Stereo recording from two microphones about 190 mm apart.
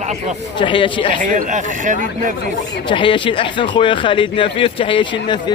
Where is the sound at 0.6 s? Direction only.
25° left (ahead or behind).